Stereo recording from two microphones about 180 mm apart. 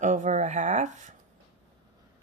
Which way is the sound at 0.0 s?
45° right (ahead or behind).